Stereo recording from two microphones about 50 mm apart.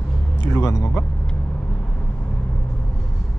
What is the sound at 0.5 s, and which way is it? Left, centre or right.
Speech, left.